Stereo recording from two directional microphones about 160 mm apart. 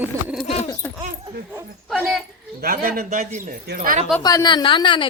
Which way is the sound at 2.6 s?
60° right (ahead or behind).